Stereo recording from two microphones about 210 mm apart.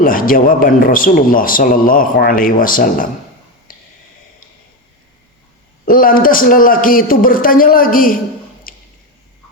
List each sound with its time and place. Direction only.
0.0 s a man's voice: 40° left (ahead or behind)
5.8 s a man's voice: 40° left (ahead or behind)
8.7 s squish: 40° left (ahead or behind)